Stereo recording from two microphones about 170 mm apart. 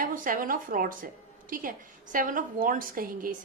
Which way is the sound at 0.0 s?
55° right (ahead or behind).